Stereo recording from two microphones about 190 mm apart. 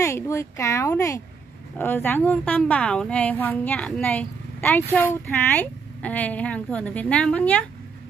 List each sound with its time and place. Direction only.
0.0 s a woman's voice: 15° left (ahead or behind)